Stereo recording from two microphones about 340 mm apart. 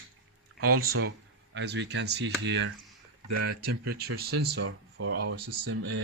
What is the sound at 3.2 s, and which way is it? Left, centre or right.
Speech, right.